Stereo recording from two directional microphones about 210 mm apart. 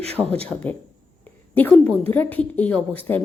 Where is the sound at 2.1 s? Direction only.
10° left (ahead or behind).